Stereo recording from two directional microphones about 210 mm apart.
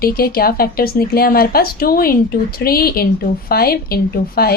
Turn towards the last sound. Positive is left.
turn(degrees=45)  # may be behind; listen again after turning